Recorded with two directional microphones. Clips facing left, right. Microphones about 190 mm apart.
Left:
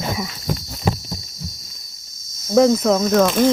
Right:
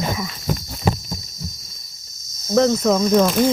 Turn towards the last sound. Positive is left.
turn(degrees=0)  # may be behind; listen again after turning